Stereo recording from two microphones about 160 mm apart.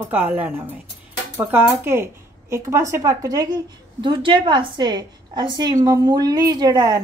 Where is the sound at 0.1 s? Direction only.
10° right (ahead or behind).